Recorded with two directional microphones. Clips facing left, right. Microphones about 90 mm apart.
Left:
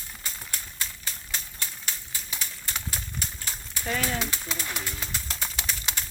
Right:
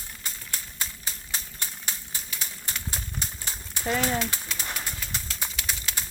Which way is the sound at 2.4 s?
25° right (ahead or behind).